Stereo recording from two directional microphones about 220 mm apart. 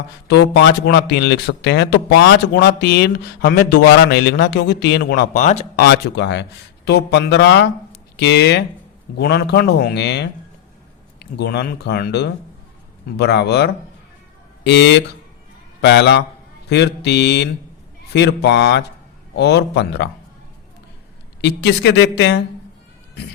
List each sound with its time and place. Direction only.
0.3 s speech: 50° left (ahead or behind); by 5.6 s 30° left (ahead or behind)
5.8 s speech: 50° left (ahead or behind)
21.4 s speech: 50° left (ahead or behind)